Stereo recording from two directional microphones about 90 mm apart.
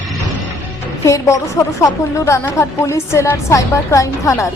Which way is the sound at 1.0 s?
35° left (ahead or behind).